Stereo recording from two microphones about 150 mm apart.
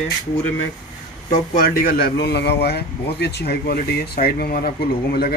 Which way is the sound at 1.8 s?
80° left.